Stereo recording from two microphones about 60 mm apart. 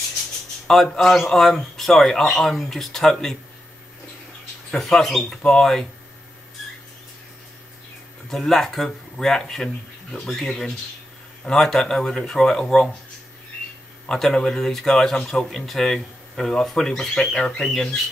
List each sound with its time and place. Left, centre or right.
0.9 s speech: centre
4.6 s speech: centre
8.3 s speech: centre
14.0 s speech: centre